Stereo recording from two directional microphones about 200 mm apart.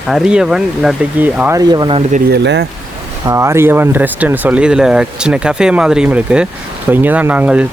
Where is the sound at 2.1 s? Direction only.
55° right (ahead or behind).